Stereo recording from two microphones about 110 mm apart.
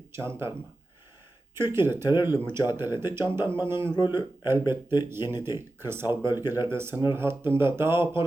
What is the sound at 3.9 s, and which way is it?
Speech, 45° left (ahead or behind).